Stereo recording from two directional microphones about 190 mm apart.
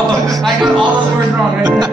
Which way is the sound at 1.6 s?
20° right (ahead or behind).